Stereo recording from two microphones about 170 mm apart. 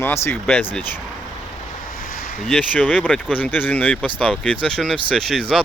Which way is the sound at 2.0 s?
55° left (ahead or behind).